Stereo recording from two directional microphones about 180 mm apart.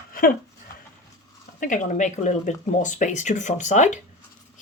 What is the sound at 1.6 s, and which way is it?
Speech, 45° left (ahead or behind).